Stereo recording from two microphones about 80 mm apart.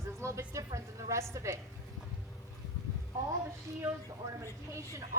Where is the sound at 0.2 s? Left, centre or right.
Right.